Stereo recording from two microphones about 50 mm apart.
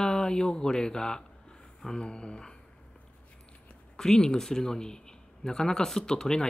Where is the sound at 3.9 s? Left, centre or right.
Centre.